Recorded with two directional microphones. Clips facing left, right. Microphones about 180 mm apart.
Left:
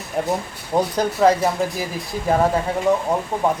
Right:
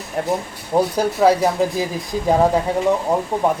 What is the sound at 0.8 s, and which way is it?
Speech, 10° right (ahead or behind).